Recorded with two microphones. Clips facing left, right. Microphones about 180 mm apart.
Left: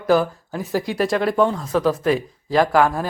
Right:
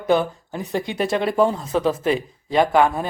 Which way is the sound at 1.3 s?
30° right (ahead or behind).